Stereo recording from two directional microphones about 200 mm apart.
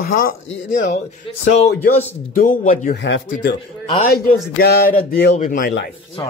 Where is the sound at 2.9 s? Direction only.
65° left (ahead or behind).